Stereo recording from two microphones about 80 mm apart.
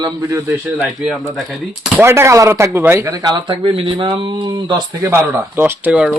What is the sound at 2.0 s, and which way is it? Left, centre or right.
Speech, right.